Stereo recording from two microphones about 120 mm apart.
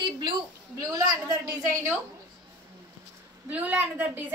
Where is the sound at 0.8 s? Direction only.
30° right (ahead or behind).